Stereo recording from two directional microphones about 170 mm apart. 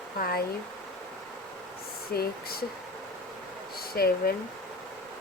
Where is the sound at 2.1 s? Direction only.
65° left (ahead or behind).